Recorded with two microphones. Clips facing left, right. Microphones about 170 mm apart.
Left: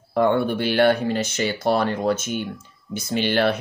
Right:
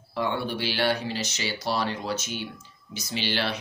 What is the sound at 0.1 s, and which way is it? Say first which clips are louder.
Speech: left 9 dB; 50° left (ahead or behind).